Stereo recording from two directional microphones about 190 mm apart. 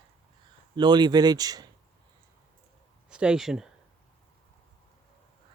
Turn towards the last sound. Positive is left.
turn(degrees=0)  # may be behind; listen again after turning